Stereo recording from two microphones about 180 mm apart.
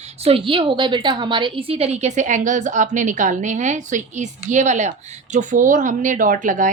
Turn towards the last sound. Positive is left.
turn(degrees=-45)  # may be behind; listen again after turning